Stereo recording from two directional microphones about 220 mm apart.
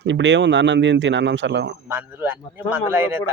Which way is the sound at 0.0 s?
55° right (ahead or behind).